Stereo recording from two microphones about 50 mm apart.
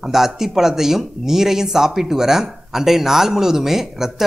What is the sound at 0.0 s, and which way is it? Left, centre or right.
Speech, centre.